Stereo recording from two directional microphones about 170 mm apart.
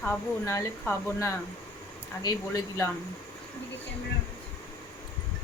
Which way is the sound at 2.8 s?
20° left (ahead or behind).